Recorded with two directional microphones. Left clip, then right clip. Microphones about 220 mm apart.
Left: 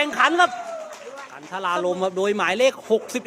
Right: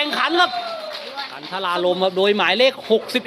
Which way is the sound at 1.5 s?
5° left (ahead or behind).